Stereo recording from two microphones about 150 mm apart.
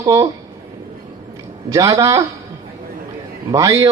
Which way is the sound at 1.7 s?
20° right (ahead or behind).